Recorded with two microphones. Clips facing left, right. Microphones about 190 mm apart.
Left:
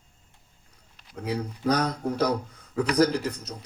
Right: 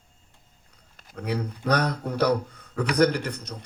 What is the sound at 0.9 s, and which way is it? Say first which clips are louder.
A man's voice: right 1 dB; 55° right (ahead or behind).